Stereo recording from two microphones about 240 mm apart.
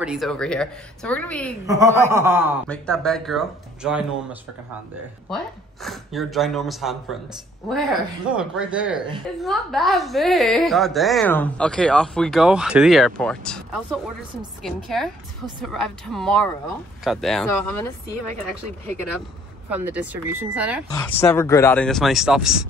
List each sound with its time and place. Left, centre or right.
0.0 s a woman's voice: centre
1.7 s speech: centre
2.7 s a woman's voice: centre
19.7 s speech: centre
20.9 s a woman's voice: centre